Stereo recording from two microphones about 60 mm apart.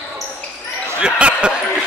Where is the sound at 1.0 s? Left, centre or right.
Centre.